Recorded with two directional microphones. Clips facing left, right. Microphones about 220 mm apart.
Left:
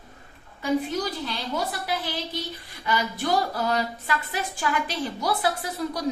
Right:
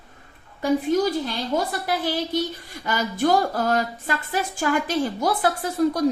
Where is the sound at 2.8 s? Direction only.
45° right (ahead or behind).